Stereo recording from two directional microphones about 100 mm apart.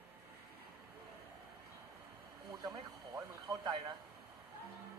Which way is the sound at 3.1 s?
40° right (ahead or behind).